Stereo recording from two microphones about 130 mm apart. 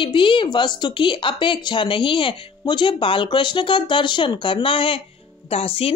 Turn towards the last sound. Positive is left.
turn(degrees=50)  # may be behind; listen again after turning